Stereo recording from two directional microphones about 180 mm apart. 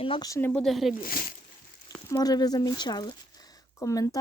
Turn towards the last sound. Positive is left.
turn(degrees=20)  # may be behind; listen again after turning